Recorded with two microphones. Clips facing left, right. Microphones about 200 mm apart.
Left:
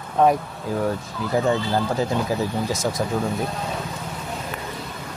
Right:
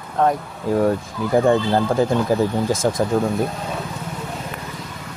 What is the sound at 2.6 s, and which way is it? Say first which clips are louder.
Speech: right 5 dB; 50° right (ahead or behind).